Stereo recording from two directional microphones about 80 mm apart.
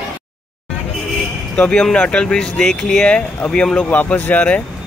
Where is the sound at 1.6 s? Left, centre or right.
Centre.